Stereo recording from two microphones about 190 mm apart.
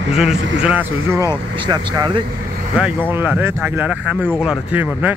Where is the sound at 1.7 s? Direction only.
25° right (ahead or behind).